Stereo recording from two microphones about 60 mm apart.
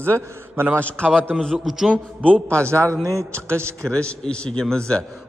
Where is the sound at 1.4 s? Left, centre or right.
Centre.